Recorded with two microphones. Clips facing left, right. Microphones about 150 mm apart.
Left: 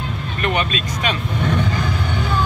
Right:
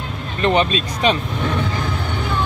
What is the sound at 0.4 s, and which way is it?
Speech, 30° right (ahead or behind).